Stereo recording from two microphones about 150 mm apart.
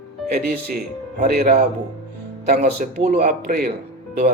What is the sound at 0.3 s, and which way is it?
A man's voice, 90° right.